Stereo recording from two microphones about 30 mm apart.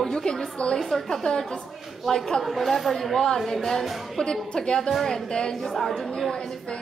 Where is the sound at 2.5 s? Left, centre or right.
Centre.